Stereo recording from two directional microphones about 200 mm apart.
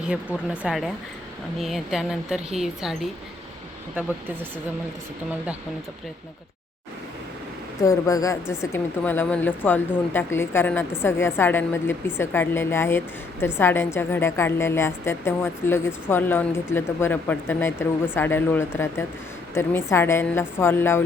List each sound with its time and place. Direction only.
0.0 s a woman's voice: 5° right (ahead or behind)
7.8 s a woman's voice: 15° left (ahead or behind)